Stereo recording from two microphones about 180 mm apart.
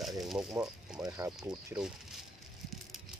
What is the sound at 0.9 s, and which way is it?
Speech, 20° right (ahead or behind).